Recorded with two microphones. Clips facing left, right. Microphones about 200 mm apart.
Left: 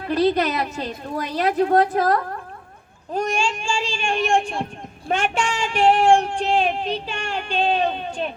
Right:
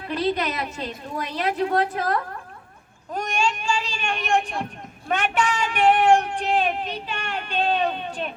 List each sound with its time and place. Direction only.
0.1 s a woman's voice: 40° left (ahead or behind)
3.1 s speech: 30° left (ahead or behind)